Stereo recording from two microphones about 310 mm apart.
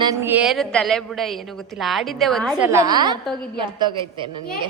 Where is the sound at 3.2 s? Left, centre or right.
Centre.